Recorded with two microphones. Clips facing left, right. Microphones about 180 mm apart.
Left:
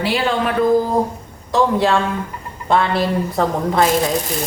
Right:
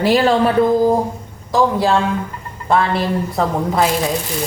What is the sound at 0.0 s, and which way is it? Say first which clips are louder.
Speech: right 5 dB; 40° right (ahead or behind).